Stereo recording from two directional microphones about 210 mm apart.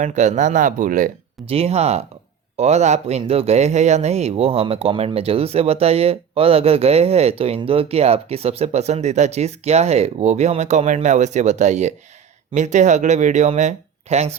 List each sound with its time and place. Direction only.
0.0 s speech: 35° right (ahead or behind)